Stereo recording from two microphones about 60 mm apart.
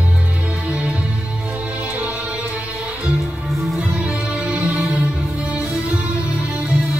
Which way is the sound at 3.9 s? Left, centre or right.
Centre.